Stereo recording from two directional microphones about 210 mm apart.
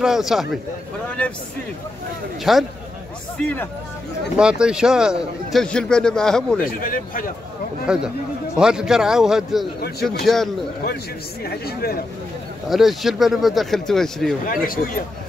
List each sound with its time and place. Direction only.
0.0 s a man's voice: centre (ahead or behind)
2.5 s a man's voice: centre (ahead or behind)
4.4 s a man's voice: 5° right (ahead or behind)
6.6 s speech: 40° left (ahead or behind)
7.8 s a man's voice: 5° right (ahead or behind)
9.8 s speech: 50° left (ahead or behind)
10.2 s a man's voice: centre (ahead or behind)
11.6 s speech: 45° left (ahead or behind)
12.6 s a man's voice: centre (ahead or behind)
14.4 s speech: 45° left (ahead or behind)